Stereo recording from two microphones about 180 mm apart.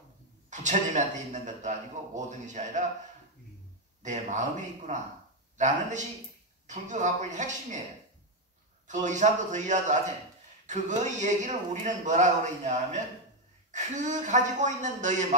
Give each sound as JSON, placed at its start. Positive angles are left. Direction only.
{"t": 0.5, "sound": "a man's voice", "side_deg": -40}
{"t": 4.0, "sound": "a man's voice", "side_deg": -40}
{"t": 8.8, "sound": "a man's voice", "side_deg": -40}